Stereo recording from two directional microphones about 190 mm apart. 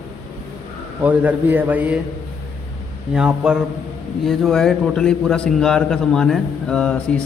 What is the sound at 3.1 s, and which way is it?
A man's voice, 5° right (ahead or behind).